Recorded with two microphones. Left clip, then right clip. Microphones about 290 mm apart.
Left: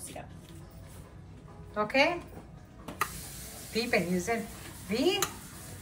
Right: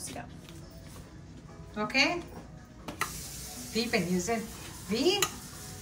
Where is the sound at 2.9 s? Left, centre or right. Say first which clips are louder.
Left 2 dB; centre.